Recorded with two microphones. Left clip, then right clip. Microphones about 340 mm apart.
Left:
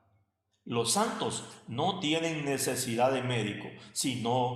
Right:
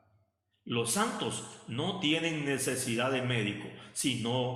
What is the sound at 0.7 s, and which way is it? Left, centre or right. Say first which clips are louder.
A man's voice: left 2 dB; centre.